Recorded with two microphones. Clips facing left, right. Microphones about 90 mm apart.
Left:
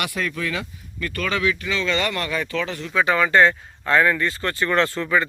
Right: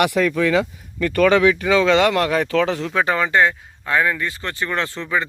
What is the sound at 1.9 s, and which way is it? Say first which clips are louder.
Speech: right 8 dB; 90° right.